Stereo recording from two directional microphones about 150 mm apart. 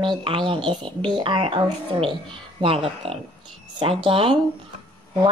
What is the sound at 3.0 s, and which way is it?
Speech, 40° right (ahead or behind).